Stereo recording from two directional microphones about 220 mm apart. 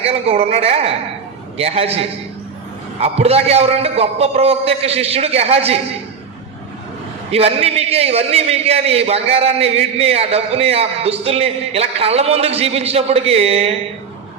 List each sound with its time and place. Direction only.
0.0 s a man's voice: 25° right (ahead or behind)
7.3 s a man's voice: 25° right (ahead or behind)